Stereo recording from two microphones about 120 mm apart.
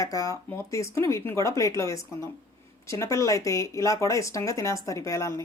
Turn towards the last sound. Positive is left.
turn(degrees=25)  # may be behind; listen again after turning